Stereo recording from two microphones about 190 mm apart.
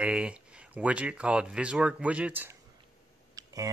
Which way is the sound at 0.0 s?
5° right (ahead or behind).